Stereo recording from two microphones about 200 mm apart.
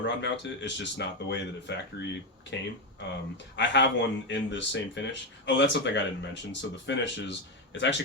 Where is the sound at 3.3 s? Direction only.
60° left (ahead or behind).